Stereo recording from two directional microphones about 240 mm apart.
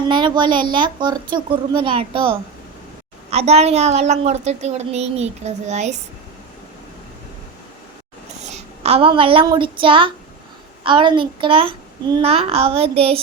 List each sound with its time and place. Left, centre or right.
0.1 s a woman's voice: centre
8.4 s a woman's voice: right